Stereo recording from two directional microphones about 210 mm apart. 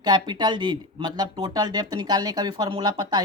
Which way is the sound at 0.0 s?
20° right (ahead or behind).